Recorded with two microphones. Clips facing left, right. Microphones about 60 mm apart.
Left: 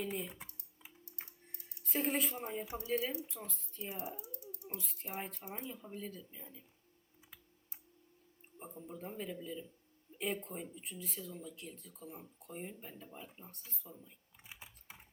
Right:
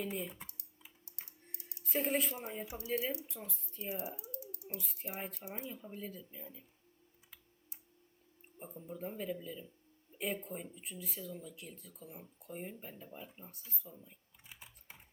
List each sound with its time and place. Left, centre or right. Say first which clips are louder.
0.0 s speech: even; centre
1.8 s speech: right 1 dB; centre
4.2 s typing: right 2 dB; right
4.6 s speech: right 1 dB; centre
8.5 s speech: right 1 dB; centre
14.4 s typing: left 2 dB; centre